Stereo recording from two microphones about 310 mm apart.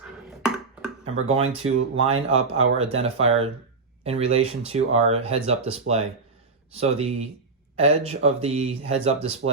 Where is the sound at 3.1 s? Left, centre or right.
Right.